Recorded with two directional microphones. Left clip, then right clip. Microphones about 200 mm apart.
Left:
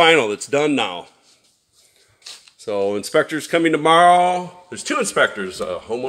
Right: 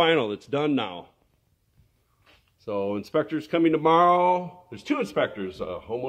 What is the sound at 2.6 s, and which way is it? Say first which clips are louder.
Speech: left 7 dB; 5° right (ahead or behind).